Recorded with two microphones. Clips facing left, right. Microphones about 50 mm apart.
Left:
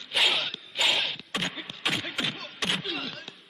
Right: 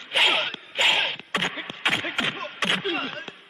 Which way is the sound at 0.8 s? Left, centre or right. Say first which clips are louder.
Right 4 dB; right.